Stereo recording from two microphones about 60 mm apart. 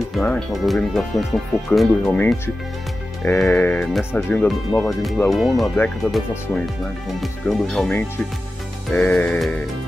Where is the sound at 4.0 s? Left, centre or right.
Left.